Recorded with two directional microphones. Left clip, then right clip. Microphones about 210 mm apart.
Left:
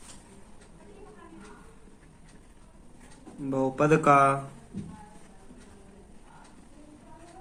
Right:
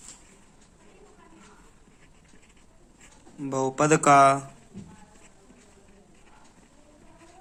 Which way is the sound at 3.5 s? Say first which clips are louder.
Right 1 dB; 50° right (ahead or behind).